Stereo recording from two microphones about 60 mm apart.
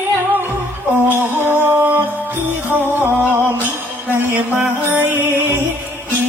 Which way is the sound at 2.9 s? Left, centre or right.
Right.